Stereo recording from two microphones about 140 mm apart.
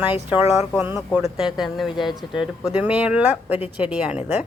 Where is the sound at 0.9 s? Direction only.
5° right (ahead or behind).